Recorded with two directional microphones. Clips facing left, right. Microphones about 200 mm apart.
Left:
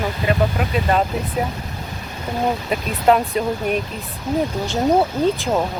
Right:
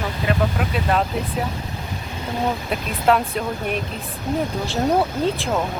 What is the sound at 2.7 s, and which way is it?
Speech, centre (ahead or behind).